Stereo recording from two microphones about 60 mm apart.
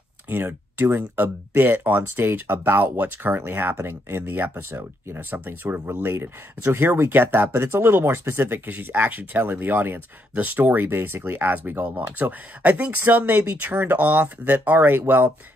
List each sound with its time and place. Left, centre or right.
0.3 s speech: right
5.3 s speech: right
8.6 s speech: right